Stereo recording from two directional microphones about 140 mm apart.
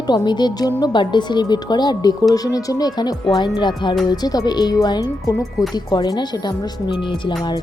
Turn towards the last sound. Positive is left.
turn(degrees=35)  # may be behind; listen again after turning